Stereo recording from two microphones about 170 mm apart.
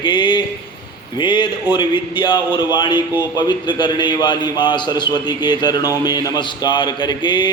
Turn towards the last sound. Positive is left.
turn(degrees=25)  # may be behind; listen again after turning